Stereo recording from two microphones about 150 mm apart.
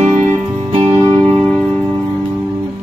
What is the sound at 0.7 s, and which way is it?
Music, 40° right (ahead or behind).